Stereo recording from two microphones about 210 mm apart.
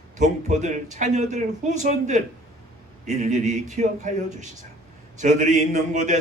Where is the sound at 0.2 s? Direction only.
35° right (ahead or behind).